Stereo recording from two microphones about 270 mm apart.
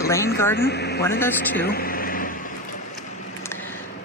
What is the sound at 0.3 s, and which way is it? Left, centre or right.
Speech, centre.